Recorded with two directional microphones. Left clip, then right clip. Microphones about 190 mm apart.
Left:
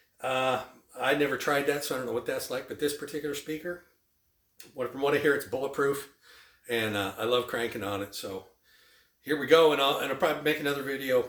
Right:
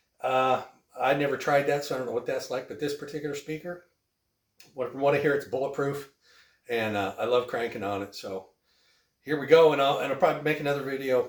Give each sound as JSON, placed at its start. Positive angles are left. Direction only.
{"t": 0.9, "sound": "speech", "side_deg": 20}
{"t": 4.5, "sound": "speech", "side_deg": 20}
{"t": 9.2, "sound": "speech", "side_deg": 20}